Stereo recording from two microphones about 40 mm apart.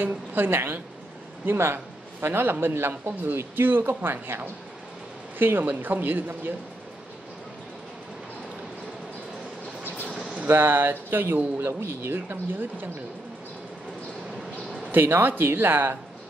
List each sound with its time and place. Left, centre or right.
0.0 s a man's voice: right
2.2 s speech: right
10.4 s speech: right
14.9 s speech: right